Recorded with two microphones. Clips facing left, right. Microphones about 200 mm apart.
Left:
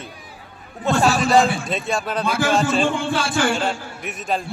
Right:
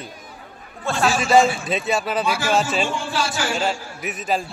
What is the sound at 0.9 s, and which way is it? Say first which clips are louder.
Speech: left 6 dB; 20° left (ahead or behind).